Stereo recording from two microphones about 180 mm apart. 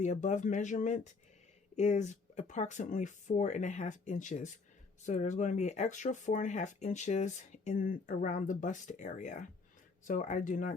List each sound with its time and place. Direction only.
0.0 s speech: 40° left (ahead or behind)